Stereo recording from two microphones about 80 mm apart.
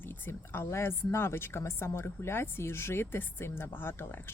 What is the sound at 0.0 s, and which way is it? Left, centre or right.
Speech, left.